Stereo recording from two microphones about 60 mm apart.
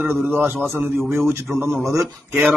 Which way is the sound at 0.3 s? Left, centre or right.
Right.